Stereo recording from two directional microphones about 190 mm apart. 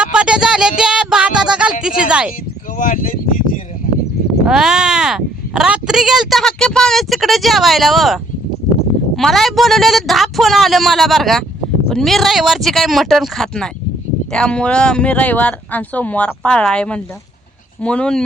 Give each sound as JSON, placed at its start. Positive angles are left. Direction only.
{"t": 0.0, "sound": "a sound", "side_deg": -5}
{"t": 0.8, "sound": "music", "side_deg": -5}
{"t": 2.7, "sound": "speech", "side_deg": 45}
{"t": 4.4, "sound": "speech", "side_deg": -5}